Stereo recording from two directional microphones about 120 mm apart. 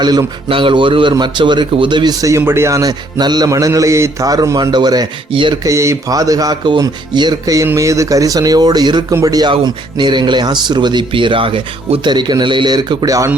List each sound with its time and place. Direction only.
0.0 s speech: 35° right (ahead or behind)
0.4 s speech: 45° right (ahead or behind)
2.2 s a man's voice: 20° right (ahead or behind)
5.3 s speech: 45° right (ahead or behind)
5.6 s a man's voice: 25° right (ahead or behind)